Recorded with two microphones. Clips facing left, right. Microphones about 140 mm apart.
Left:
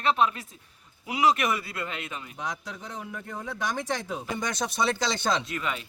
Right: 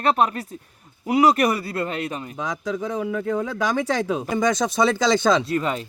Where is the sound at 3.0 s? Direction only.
90° right.